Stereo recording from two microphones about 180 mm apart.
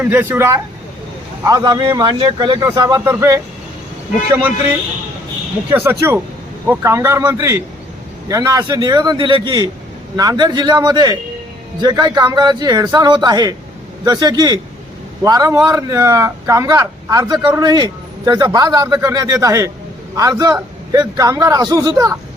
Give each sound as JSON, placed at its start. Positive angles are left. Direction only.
{"t": 0.0, "sound": "a man's voice", "side_deg": -10}
{"t": 5.7, "sound": "a man's voice", "side_deg": -15}